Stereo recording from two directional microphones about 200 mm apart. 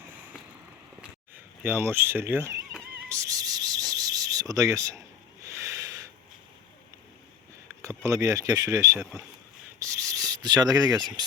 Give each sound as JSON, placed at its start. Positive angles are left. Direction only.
{"t": 1.6, "sound": "speech", "side_deg": -10}
{"t": 3.1, "sound": "a sound", "side_deg": -15}
{"t": 7.8, "sound": "speech", "side_deg": -15}
{"t": 9.8, "sound": "rub", "side_deg": -15}